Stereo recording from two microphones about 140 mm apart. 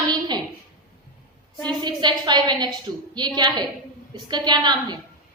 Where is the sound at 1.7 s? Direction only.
30° right (ahead or behind).